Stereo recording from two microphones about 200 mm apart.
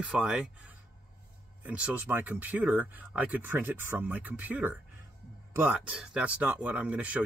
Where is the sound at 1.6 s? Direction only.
5° right (ahead or behind).